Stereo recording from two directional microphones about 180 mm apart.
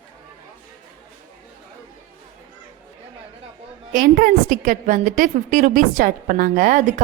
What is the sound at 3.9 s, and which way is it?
A woman's voice, 55° right (ahead or behind).